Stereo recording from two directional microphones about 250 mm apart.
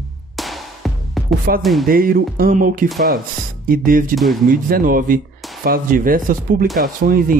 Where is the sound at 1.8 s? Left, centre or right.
Right.